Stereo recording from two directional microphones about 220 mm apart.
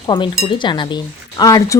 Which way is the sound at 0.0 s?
25° left (ahead or behind).